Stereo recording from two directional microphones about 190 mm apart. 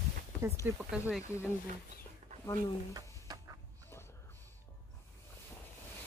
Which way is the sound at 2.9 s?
20° right (ahead or behind).